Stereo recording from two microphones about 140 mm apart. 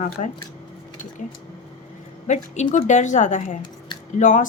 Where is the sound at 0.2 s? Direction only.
65° left (ahead or behind).